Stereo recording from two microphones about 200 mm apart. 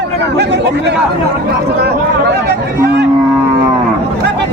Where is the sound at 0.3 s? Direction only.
55° right (ahead or behind).